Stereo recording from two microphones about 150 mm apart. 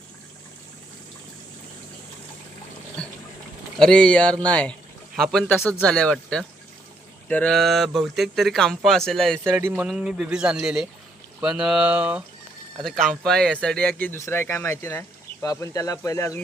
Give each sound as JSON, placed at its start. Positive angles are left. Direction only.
{"t": 3.8, "sound": "speech", "side_deg": 5}
{"t": 9.4, "sound": "speech", "side_deg": -15}
{"t": 9.8, "sound": "speech", "side_deg": -5}
{"t": 12.8, "sound": "speech", "side_deg": 5}